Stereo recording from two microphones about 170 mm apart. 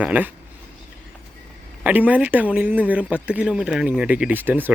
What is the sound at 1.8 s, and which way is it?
Speech, 10° right (ahead or behind).